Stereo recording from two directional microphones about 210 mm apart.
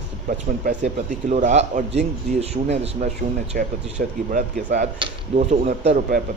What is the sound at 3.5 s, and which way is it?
Speech, 45° right (ahead or behind).